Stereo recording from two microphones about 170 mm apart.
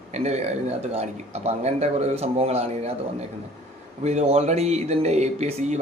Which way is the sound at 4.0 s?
40° right (ahead or behind).